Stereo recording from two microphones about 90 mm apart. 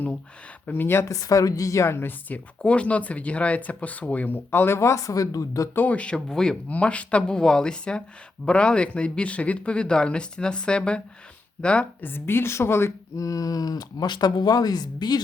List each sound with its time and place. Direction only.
0.7 s speech: 25° left (ahead or behind); by 5.6 s 40° left (ahead or behind)
5.7 s speech: 20° left (ahead or behind); by 15.2 s 50° left (ahead or behind)